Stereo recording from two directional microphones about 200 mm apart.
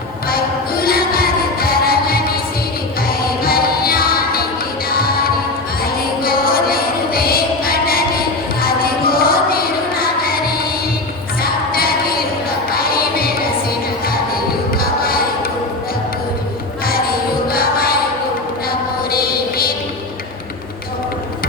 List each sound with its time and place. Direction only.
0.3 s music: 50° left (ahead or behind)
14.8 s a sound: 45° left (ahead or behind)
17.5 s music: 50° left (ahead or behind)
19.1 s music: 50° left (ahead or behind)